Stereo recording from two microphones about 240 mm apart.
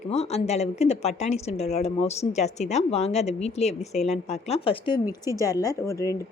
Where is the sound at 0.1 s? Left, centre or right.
Left.